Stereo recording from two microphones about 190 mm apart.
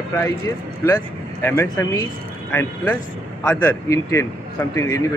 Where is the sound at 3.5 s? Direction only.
15° left (ahead or behind).